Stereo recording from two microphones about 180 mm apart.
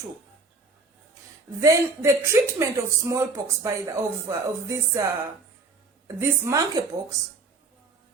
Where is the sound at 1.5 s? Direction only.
15° right (ahead or behind).